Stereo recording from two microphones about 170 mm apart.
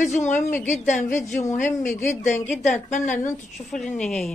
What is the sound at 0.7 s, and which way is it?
A woman's voice, 45° left (ahead or behind).